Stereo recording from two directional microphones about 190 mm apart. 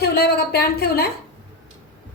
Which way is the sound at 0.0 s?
60° left (ahead or behind).